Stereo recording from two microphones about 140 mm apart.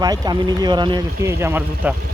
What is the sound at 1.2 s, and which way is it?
Speech, 15° right (ahead or behind).